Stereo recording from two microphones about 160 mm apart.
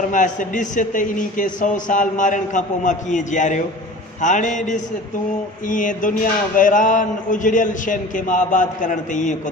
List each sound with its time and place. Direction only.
0.1 s a man's voice: 55° left (ahead or behind)
5.6 s a sound: 55° left (ahead or behind)
6.6 s a man's voice: 55° left (ahead or behind)